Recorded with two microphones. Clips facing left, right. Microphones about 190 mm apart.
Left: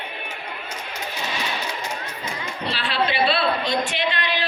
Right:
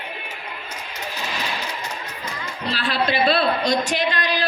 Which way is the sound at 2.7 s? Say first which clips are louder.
Right 2 dB; 40° right (ahead or behind).